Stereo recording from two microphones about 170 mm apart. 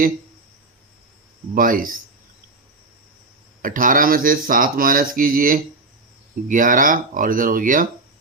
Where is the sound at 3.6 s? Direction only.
50° right (ahead or behind).